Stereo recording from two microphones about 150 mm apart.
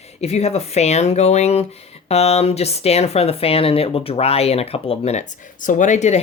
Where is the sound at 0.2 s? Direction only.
45° left (ahead or behind).